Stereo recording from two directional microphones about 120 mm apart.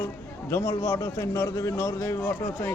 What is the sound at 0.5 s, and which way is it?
A man's voice, 25° left (ahead or behind).